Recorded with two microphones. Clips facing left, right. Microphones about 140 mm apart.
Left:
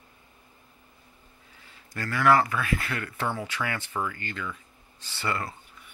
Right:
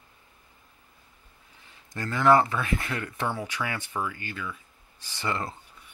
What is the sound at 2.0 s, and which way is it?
Speech, 20° right (ahead or behind).